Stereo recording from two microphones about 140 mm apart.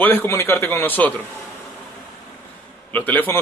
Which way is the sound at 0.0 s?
15° left (ahead or behind).